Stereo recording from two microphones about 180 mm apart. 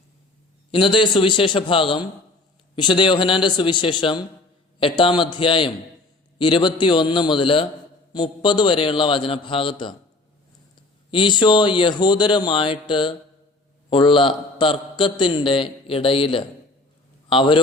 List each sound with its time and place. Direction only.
0.7 s a man's voice: 30° left (ahead or behind)
11.1 s a man's voice: 25° left (ahead or behind)